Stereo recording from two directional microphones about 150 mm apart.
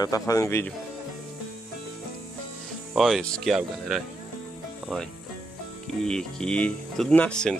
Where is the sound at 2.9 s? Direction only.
Centre (ahead or behind).